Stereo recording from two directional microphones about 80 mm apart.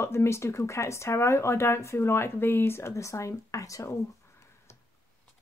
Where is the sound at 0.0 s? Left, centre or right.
Left.